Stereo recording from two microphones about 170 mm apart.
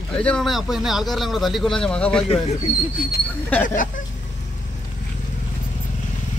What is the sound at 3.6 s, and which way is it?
Speech, 50° left (ahead or behind).